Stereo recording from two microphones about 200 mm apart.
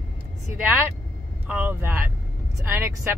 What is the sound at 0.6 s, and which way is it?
Speech, 10° right (ahead or behind).